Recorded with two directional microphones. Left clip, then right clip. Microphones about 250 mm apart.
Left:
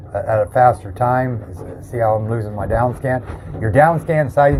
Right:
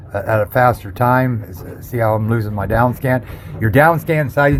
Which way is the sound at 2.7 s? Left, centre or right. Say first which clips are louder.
Right 2 dB; right.